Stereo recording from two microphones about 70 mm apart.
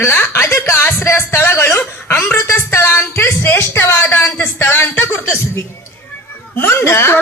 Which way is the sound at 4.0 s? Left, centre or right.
Left.